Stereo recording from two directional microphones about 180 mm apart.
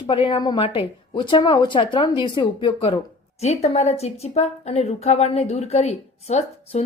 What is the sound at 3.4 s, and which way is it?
A woman's voice, 35° left (ahead or behind).